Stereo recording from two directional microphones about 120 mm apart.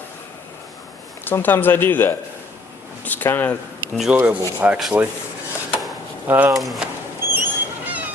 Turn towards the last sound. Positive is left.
turn(degrees=-15)  # may be behind; listen again after turning